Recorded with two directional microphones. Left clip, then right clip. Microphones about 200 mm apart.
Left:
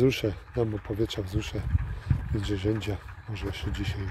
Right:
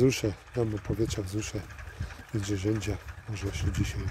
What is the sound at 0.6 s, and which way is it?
Speech, 35° right (ahead or behind).